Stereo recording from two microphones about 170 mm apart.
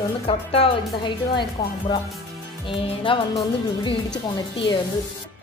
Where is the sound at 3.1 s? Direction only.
30° left (ahead or behind).